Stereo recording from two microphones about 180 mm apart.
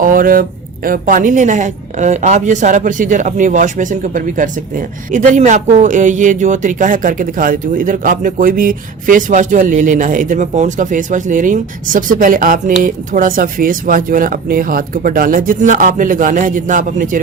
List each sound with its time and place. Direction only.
0.0 s speech: 50° right (ahead or behind)